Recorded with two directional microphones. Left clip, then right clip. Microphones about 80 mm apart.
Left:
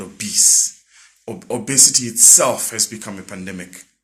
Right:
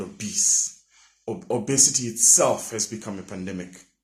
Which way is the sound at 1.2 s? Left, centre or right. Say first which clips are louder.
Left 2 dB; right.